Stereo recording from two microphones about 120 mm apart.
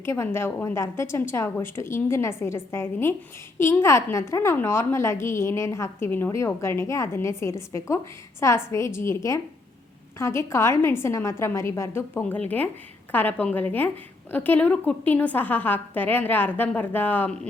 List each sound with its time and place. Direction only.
0.0 s a woman's voice: 20° left (ahead or behind)